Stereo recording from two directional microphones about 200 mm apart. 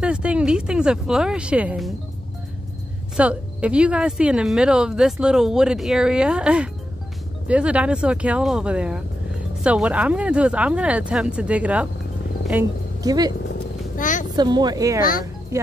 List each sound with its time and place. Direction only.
0.0 s speech: 5° right (ahead or behind)
3.2 s speech: 5° right (ahead or behind)
13.9 s a sound: 40° left (ahead or behind)
14.3 s speech: 20° right (ahead or behind)